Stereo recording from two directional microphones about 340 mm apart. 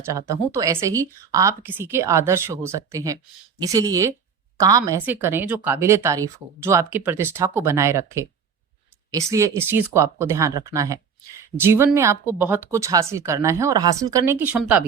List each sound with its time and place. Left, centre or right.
0.0 s speech: centre